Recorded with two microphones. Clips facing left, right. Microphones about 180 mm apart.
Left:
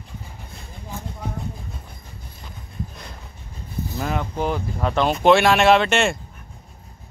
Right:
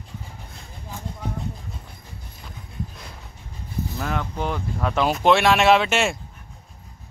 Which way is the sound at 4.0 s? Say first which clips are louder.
Left 3 dB; 5° left (ahead or behind).